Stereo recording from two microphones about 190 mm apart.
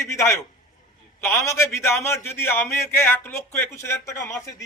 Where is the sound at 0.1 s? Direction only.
15° left (ahead or behind).